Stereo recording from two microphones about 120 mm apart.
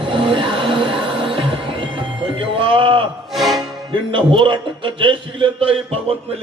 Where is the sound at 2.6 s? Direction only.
45° right (ahead or behind).